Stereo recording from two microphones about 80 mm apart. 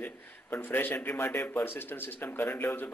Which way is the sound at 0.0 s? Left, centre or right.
Left.